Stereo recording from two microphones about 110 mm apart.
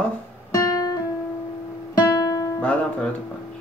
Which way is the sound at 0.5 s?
30° left (ahead or behind).